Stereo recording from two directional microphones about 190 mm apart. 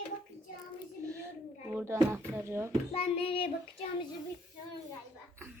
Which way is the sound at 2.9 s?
30° left (ahead or behind).